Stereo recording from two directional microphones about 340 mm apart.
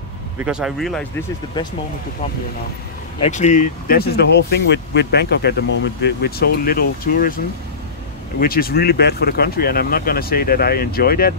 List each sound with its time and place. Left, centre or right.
0.4 s speech: centre
3.3 s speech: left
8.4 s speech: left